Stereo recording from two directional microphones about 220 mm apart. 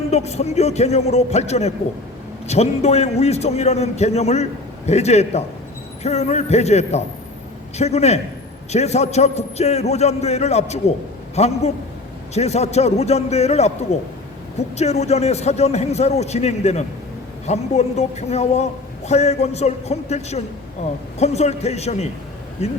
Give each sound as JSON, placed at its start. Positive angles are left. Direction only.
{"t": 0.1, "sound": "a man's voice", "side_deg": 30}
{"t": 14.8, "sound": "a man's voice", "side_deg": 30}